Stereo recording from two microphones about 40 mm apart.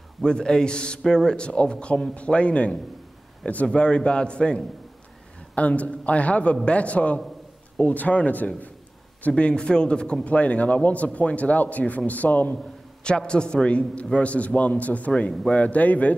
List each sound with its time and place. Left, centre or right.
0.2 s a man's voice: centre
5.5 s a man's voice: left
9.4 s speech: left
10.2 s a man's voice: left
13.0 s a man's voice: left